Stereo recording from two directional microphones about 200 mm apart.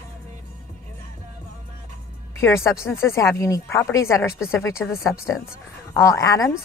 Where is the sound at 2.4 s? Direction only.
15° left (ahead or behind).